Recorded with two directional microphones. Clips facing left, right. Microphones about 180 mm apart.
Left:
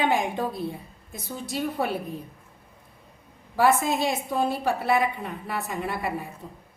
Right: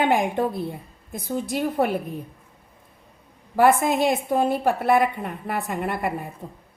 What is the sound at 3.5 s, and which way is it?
A woman's voice, 55° right (ahead or behind).